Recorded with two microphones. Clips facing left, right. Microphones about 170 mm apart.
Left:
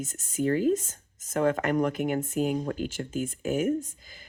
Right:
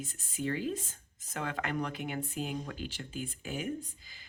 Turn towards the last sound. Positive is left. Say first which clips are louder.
# left 10 dB
turn(degrees=45)  # may be behind; listen again after turning